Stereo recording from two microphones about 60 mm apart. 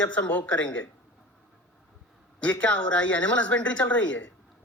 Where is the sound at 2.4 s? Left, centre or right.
Centre.